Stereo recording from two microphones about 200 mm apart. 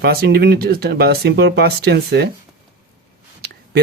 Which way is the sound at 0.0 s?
50° right (ahead or behind).